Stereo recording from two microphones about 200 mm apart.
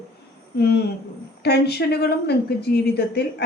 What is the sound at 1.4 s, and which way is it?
A woman's voice, 55° left (ahead or behind).